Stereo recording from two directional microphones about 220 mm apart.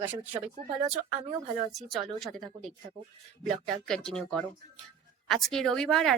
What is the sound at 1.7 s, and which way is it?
Speech, centre (ahead or behind).